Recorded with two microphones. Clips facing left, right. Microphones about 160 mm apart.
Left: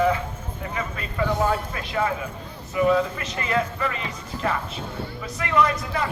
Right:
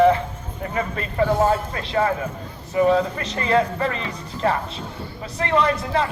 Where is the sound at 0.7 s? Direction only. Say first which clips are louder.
Right 6 dB; 40° right (ahead or behind).